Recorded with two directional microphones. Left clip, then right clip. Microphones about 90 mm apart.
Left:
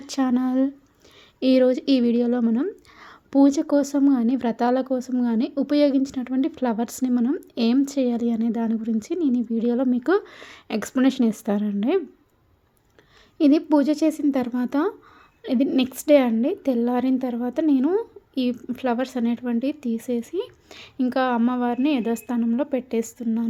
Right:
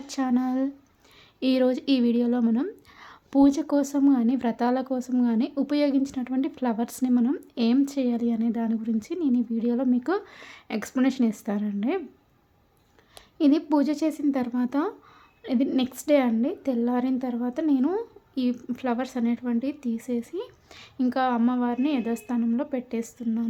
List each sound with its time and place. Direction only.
0.1 s a woman's voice: 40° left (ahead or behind); by 7.4 s 15° left (ahead or behind)
7.5 s a woman's voice: 25° left (ahead or behind)
13.4 s a woman's voice: 25° left (ahead or behind)